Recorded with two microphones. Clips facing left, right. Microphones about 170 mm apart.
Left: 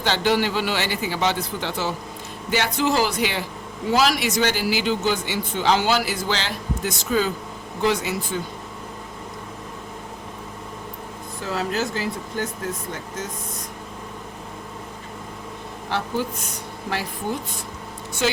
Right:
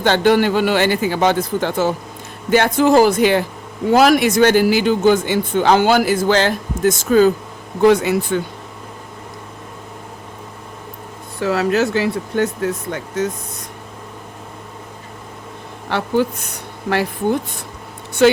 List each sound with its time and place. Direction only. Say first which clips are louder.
0.0 s speech: right 7 dB; 55° right (ahead or behind)
11.3 s speech: right 9 dB; 70° right (ahead or behind)
15.9 s speech: right 8 dB; 65° right (ahead or behind)